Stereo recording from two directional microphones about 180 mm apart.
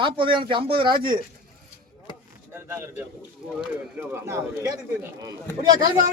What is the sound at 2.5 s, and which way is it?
Speech, 15° right (ahead or behind).